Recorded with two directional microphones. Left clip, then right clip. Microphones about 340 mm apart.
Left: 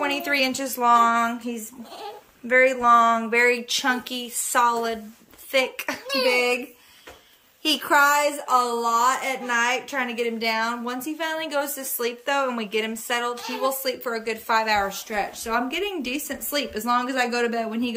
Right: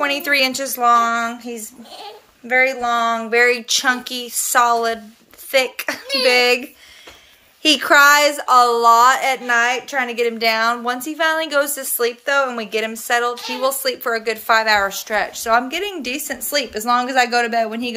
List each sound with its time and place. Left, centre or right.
0.0 s a woman's voice: centre
7.6 s a woman's voice: centre
13.3 s a woman's voice: centre
13.6 s a woman's voice: centre